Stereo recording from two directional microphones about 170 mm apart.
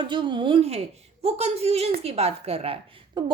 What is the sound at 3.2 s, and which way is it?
Speech, 25° right (ahead or behind).